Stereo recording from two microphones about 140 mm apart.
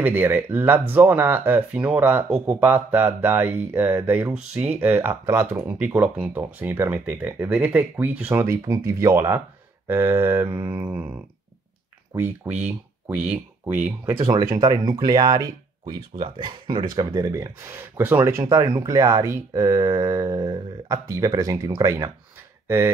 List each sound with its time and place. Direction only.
0.0 s speech: 15° right (ahead or behind)
14.2 s speech: 25° right (ahead or behind)